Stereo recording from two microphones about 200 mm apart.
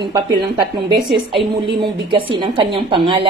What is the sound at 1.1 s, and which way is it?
A woman's voice, 25° right (ahead or behind).